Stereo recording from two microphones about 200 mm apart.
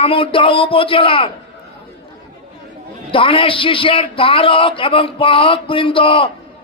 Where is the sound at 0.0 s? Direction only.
25° left (ahead or behind).